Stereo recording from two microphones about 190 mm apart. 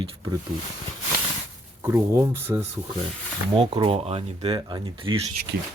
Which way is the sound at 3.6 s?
30° right (ahead or behind).